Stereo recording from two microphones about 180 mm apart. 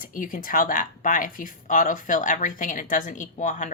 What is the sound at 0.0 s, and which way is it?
A woman's voice, 50° left (ahead or behind).